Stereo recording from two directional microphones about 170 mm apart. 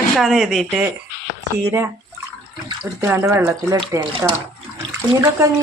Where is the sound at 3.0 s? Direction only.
15° right (ahead or behind).